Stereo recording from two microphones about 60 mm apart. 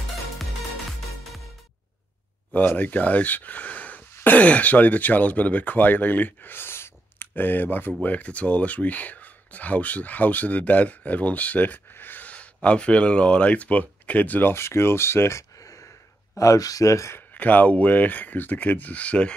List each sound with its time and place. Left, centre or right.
2.5 s speech: left
14.5 s speech: left
17.3 s speech: left